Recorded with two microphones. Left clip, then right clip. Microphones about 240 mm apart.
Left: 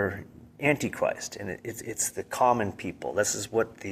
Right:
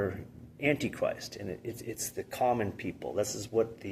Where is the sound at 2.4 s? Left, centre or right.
Left.